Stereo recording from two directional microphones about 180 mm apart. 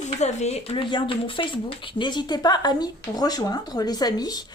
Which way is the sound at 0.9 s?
30° left (ahead or behind).